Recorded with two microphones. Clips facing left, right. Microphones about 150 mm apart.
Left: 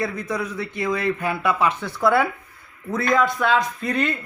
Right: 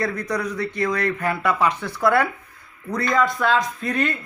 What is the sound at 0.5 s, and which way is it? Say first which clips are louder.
A man's voice: right 1 dB; 5° left (ahead or behind).